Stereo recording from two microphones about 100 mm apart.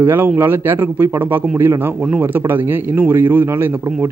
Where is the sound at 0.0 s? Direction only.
20° right (ahead or behind).